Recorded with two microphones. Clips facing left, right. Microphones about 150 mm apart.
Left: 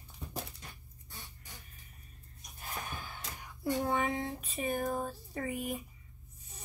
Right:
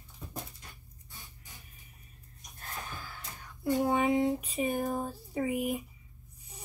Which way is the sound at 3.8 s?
15° right (ahead or behind).